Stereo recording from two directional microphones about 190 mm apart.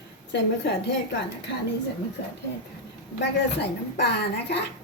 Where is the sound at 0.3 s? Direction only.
65° left (ahead or behind).